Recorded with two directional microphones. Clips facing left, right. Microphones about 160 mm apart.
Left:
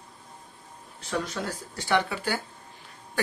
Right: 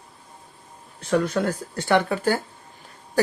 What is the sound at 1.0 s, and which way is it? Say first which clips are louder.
Speech: right 9 dB; 60° right (ahead or behind).